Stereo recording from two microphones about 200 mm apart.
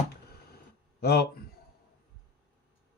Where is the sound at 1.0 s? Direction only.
50° left (ahead or behind).